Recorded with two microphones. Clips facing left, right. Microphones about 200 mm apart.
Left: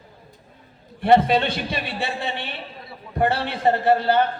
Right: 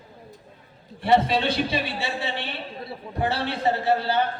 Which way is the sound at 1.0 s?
55° left (ahead or behind).